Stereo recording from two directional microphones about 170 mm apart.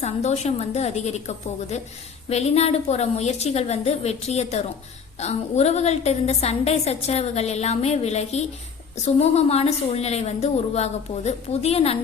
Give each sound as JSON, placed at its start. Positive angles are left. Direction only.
{"t": 0.0, "sound": "a woman's voice", "side_deg": 40}